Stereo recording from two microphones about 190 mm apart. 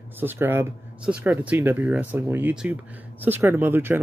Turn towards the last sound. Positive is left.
turn(degrees=-10)  # may be behind; listen again after turning